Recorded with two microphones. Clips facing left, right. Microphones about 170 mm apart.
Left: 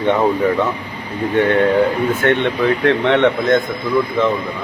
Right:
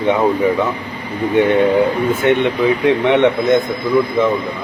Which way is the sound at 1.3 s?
15° right (ahead or behind).